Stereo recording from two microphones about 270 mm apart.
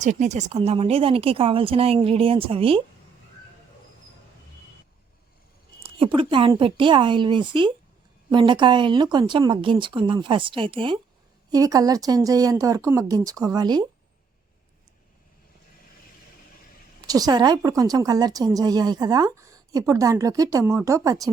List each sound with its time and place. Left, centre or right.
0.0 s speech: right
5.8 s a woman's voice: centre
17.1 s a woman's voice: centre